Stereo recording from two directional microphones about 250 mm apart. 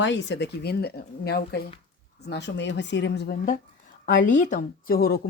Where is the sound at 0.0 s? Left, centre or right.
Left.